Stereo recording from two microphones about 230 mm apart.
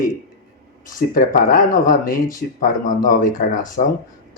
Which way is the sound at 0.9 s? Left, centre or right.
Left.